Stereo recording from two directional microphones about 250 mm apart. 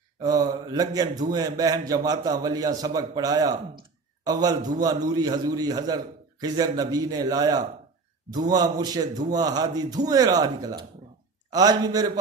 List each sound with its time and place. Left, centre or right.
0.2 s a man's voice: centre